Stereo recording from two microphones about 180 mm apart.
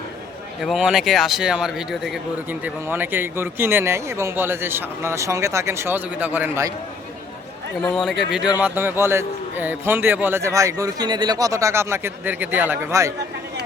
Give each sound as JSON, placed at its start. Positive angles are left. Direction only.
{"t": 0.6, "sound": "speech", "side_deg": 0}
{"t": 7.8, "sound": "speech", "side_deg": 5}